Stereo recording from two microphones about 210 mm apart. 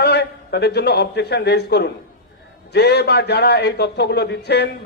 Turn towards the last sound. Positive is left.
turn(degrees=50)  # may be behind; listen again after turning